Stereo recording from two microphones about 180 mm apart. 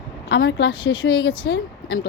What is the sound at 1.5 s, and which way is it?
Speech, 70° left (ahead or behind).